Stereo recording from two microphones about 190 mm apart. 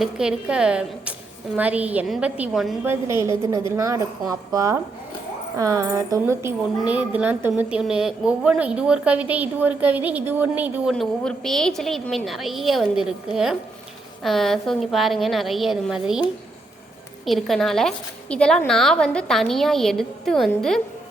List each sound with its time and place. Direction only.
0.0 s a woman's voice: 5° right (ahead or behind)
2.8 s a woman's voice: 15° right (ahead or behind)
17.2 s a woman's voice: centre (ahead or behind)